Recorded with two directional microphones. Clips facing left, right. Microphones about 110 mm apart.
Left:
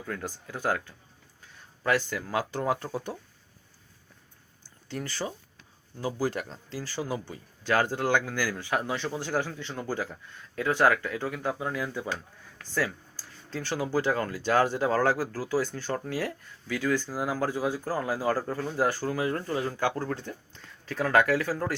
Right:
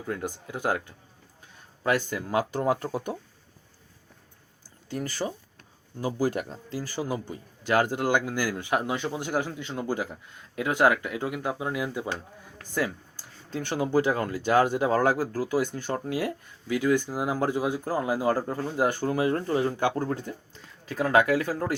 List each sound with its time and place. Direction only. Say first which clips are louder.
0.0 s speech: right 3 dB; 20° right (ahead or behind)
5.2 s speech: right 3 dB; centre (ahead or behind)
6.1 s speech: right 4 dB; 15° right (ahead or behind)
20.1 s speech: right 3 dB; 5° right (ahead or behind)